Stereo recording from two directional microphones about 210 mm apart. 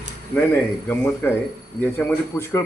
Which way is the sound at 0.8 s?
10° left (ahead or behind).